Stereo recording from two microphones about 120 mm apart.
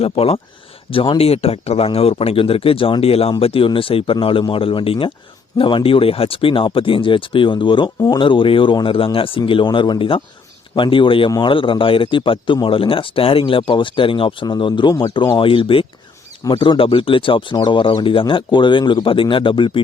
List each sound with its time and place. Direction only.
0.0 s speech: 55° left (ahead or behind)